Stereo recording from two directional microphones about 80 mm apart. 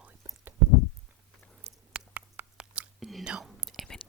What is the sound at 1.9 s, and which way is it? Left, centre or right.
Mouse, centre.